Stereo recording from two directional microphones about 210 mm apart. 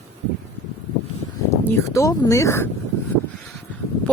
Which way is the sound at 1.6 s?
15° left (ahead or behind).